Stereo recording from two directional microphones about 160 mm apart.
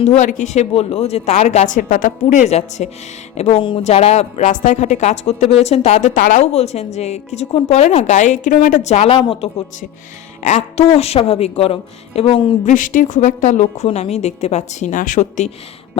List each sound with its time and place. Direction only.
0.0 s speech: 40° left (ahead or behind)
9.1 s speech: 30° left (ahead or behind)
10.4 s speech: 45° left (ahead or behind)
12.6 s speech: 55° left (ahead or behind)